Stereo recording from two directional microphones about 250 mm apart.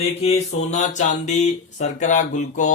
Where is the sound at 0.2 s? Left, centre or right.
Left.